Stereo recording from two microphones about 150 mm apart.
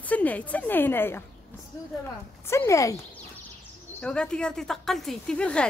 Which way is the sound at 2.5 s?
20° left (ahead or behind).